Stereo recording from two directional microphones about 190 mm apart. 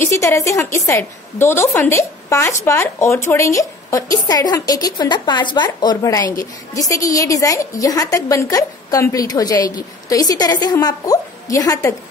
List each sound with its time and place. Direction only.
0.0 s a woman's voice: 15° left (ahead or behind)